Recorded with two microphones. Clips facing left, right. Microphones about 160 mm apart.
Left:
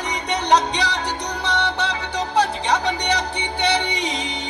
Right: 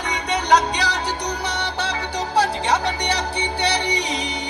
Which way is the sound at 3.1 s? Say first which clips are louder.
Even; 20° left (ahead or behind).